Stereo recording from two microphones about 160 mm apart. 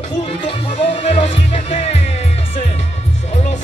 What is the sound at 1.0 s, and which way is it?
Music, 45° left (ahead or behind).